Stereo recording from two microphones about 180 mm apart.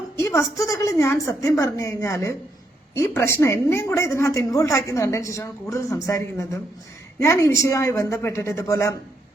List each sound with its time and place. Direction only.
0.2 s a woman's voice: 15° left (ahead or behind)